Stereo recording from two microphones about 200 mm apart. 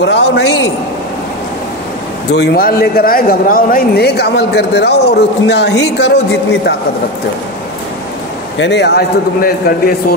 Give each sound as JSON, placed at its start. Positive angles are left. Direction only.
{"t": 0.0, "sound": "speech", "side_deg": 60}
{"t": 2.3, "sound": "speech", "side_deg": 50}
{"t": 8.5, "sound": "speech", "side_deg": 60}